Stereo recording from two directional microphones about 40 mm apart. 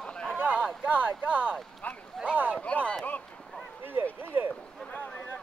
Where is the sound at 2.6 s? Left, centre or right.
Left.